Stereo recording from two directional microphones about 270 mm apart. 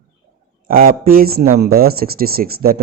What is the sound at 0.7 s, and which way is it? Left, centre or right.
Speech, right.